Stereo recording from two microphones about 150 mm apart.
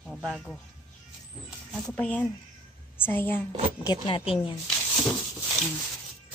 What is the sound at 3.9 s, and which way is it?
Speech, 35° left (ahead or behind).